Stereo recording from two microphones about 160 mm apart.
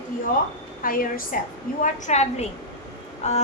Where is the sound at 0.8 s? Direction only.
60° left (ahead or behind).